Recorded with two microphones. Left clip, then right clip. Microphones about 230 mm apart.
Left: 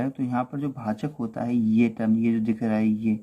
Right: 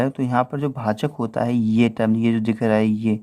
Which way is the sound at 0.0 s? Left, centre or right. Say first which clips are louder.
Right 7 dB; right.